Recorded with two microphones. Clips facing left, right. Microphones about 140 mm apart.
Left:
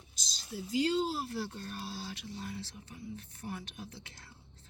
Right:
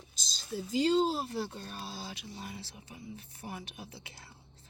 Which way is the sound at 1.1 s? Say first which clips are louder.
Right 2 dB; 20° right (ahead or behind).